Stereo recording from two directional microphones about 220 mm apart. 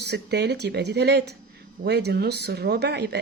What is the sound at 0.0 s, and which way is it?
Speech, 50° right (ahead or behind).